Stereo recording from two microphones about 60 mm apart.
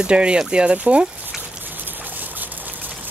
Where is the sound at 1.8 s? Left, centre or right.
Right.